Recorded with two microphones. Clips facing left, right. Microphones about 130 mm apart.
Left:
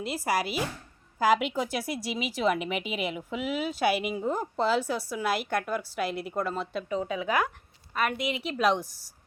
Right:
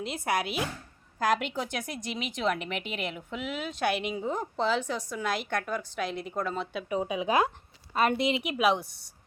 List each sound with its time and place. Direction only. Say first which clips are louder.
0.0 s speech: left 1 dB; 5° left (ahead or behind)
6.8 s speech: right 2 dB; 15° right (ahead or behind)
8.6 s speech: left 1 dB; centre (ahead or behind)